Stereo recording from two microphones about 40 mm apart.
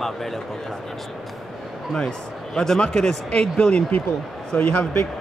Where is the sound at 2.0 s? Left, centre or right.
Left.